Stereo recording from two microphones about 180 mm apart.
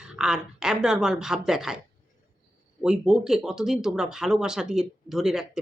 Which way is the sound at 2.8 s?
5° right (ahead or behind).